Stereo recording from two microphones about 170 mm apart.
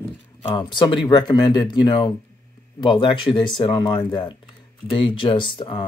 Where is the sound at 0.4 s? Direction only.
30° left (ahead or behind).